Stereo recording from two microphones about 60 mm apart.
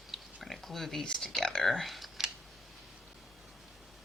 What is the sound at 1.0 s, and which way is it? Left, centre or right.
Speech, centre.